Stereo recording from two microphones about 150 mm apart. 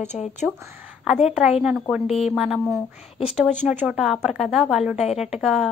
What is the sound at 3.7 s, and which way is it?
A woman's voice, 5° right (ahead or behind).